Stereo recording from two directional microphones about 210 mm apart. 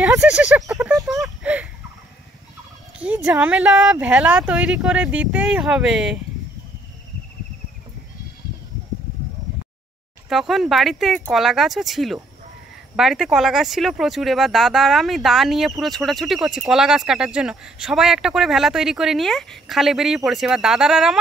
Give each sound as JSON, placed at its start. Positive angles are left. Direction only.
{"t": 0.0, "sound": "speech", "side_deg": -5}
{"t": 1.2, "sound": "a sound", "side_deg": -5}
{"t": 3.0, "sound": "speech", "side_deg": -5}
{"t": 10.3, "sound": "speech", "side_deg": 0}